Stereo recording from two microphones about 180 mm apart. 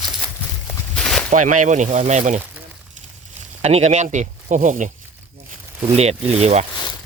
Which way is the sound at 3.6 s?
35° right (ahead or behind).